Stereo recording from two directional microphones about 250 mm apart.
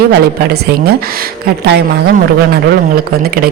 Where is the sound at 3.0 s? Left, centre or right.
Right.